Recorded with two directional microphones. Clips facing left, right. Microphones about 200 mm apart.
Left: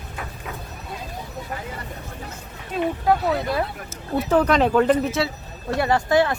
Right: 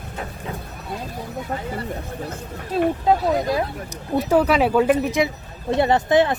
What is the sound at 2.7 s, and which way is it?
Speech, 35° right (ahead or behind).